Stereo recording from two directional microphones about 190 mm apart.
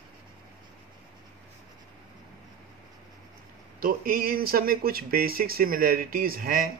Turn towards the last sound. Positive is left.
turn(degrees=-50)  # may be behind; listen again after turning